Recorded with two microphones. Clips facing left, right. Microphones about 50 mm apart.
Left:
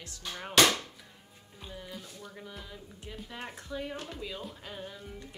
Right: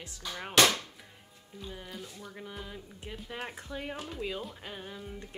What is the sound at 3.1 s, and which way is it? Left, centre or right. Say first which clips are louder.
Speech: right 2 dB; centre.